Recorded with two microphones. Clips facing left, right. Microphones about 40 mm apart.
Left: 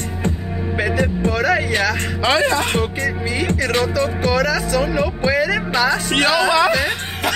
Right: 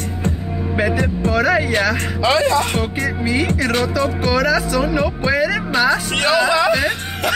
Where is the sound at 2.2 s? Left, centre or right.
Left.